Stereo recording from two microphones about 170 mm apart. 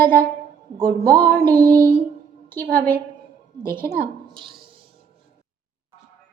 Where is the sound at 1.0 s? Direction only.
65° right (ahead or behind).